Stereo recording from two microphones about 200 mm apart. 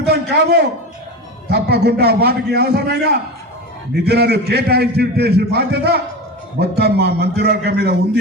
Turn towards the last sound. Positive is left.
turn(degrees=-55)  # may be behind; listen again after turning